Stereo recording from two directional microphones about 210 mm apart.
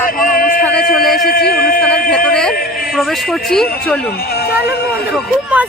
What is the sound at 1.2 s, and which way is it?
Speech, 45° left (ahead or behind).